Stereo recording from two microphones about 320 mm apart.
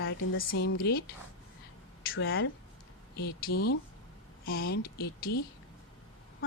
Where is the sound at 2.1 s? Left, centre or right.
Left.